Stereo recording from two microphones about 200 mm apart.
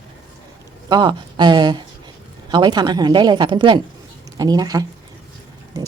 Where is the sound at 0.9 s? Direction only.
20° right (ahead or behind).